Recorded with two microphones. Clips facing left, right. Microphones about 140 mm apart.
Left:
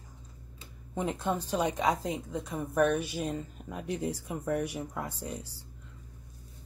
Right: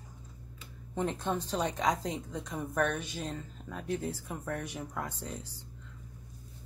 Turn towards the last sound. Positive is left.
turn(degrees=10)  # may be behind; listen again after turning